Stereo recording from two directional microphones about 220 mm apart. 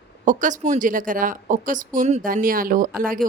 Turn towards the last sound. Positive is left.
turn(degrees=-40)  # may be behind; listen again after turning